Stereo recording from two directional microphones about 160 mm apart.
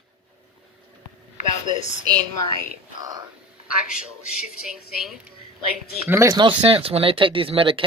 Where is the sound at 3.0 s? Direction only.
25° right (ahead or behind).